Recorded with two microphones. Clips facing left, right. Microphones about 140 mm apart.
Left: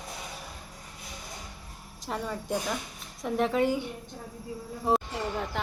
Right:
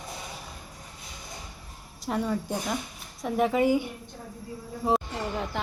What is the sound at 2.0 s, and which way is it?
Speech, centre (ahead or behind).